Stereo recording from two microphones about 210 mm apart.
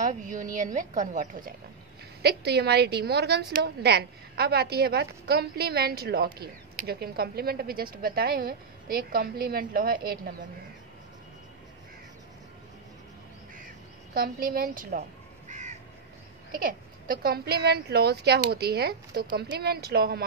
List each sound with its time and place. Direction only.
0.0 s a woman's voice: 35° right (ahead or behind)
2.2 s a woman's voice: 50° right (ahead or behind)
14.1 s crow: 45° right (ahead or behind)
16.5 s a woman's voice: 45° right (ahead or behind)